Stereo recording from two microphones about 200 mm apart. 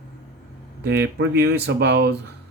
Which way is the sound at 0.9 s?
55° right (ahead or behind).